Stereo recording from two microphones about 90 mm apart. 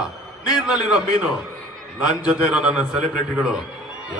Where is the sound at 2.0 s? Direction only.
10° right (ahead or behind).